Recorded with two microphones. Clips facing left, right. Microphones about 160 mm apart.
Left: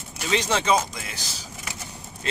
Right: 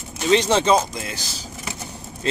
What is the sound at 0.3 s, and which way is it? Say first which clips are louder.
Speech: right 6 dB; 25° right (ahead or behind).